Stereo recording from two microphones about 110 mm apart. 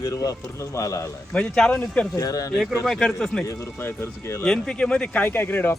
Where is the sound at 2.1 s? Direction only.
35° left (ahead or behind).